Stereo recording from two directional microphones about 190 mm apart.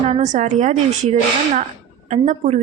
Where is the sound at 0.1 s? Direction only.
40° right (ahead or behind).